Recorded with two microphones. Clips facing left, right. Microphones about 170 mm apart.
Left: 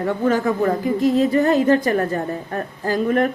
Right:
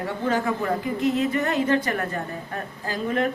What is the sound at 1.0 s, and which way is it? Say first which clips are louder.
A woman's voice: left 7 dB; 35° left (ahead or behind).